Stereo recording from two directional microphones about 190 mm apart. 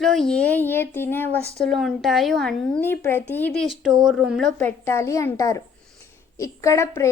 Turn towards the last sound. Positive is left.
turn(degrees=15)  # may be behind; listen again after turning